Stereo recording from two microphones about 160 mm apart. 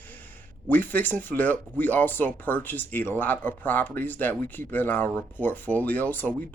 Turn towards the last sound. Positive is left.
turn(degrees=10)  # may be behind; listen again after turning